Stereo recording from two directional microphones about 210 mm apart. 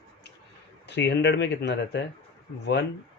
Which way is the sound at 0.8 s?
55° left (ahead or behind).